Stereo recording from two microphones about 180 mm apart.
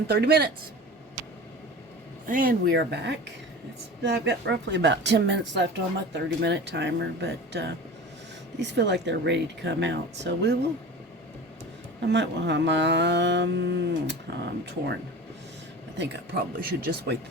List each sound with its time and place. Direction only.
0.1 s speech: 60° right (ahead or behind)
2.2 s speech: 50° right (ahead or behind); by 10.6 s 70° right (ahead or behind)
12.0 s speech: 75° right (ahead or behind)
16.0 s speech: 60° right (ahead or behind)